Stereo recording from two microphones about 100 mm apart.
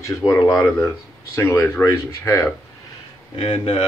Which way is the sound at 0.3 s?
35° left (ahead or behind).